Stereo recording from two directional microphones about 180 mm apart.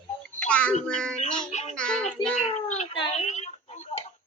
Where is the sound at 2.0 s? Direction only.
40° left (ahead or behind).